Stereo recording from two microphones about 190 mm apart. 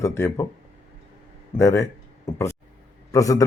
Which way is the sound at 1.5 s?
15° left (ahead or behind).